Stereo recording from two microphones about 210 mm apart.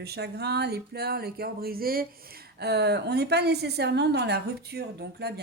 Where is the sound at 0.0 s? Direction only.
50° right (ahead or behind).